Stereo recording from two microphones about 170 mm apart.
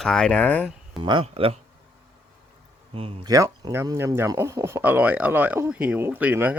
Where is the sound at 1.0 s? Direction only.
30° right (ahead or behind).